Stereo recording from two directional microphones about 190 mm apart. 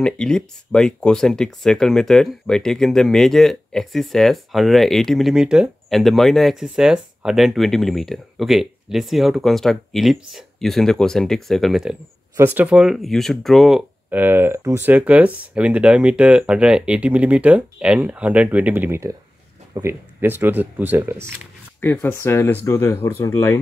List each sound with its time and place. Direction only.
0.0 s speech: 5° left (ahead or behind); by 21.4 s 10° right (ahead or behind)
21.8 s speech: 10° left (ahead or behind)